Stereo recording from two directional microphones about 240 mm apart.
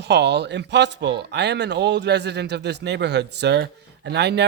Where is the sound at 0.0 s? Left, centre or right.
Right.